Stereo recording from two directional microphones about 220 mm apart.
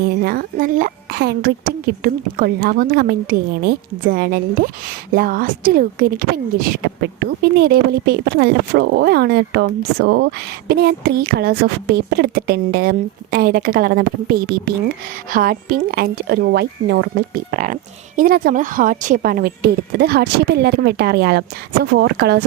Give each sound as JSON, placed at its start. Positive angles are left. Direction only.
{"t": 0.2, "sound": "a woman's voice", "side_deg": -40}